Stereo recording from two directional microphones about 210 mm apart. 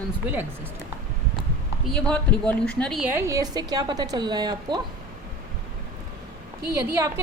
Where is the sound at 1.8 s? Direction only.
5° left (ahead or behind).